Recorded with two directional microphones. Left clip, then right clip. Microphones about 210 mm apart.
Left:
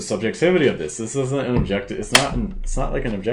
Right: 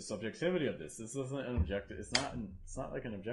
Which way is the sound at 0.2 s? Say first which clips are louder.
Left 18 dB; 35° right (ahead or behind).